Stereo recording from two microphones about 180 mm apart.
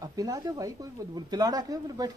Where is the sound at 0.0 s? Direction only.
20° right (ahead or behind).